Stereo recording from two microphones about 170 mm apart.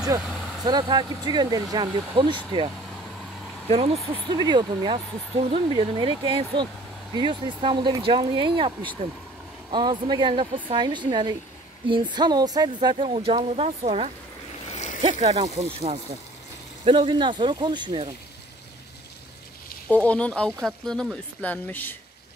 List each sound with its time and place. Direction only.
0.7 s speech: 25° right (ahead or behind)
4.1 s speech: 25° right (ahead or behind)
12.9 s speech: 35° right (ahead or behind)
14.7 s splash: 45° left (ahead or behind)
15.0 s speech: 40° right (ahead or behind)
19.9 s speech: 10° left (ahead or behind)